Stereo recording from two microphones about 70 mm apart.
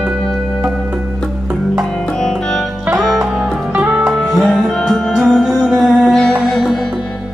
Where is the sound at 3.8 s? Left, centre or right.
Centre.